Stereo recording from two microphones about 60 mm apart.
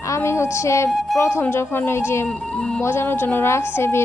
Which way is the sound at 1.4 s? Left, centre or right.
Left.